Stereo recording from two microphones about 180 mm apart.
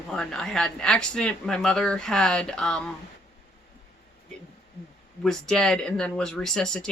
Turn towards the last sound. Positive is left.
turn(degrees=5)  # may be behind; listen again after turning